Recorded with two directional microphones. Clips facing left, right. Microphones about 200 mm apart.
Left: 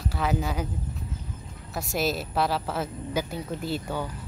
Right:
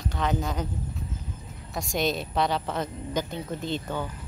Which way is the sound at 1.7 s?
5° left (ahead or behind).